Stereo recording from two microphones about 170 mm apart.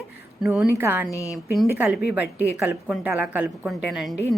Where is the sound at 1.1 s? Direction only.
20° left (ahead or behind).